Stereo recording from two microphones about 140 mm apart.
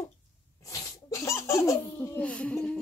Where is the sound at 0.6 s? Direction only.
25° left (ahead or behind); by 2.8 s 5° left (ahead or behind).